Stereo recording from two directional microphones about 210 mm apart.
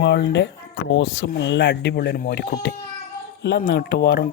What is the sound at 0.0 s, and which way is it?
Speech, 55° left (ahead or behind).